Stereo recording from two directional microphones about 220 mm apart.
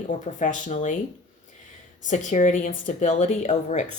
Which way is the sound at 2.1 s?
35° left (ahead or behind).